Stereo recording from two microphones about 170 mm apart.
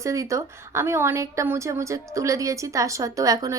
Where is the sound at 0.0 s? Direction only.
20° right (ahead or behind).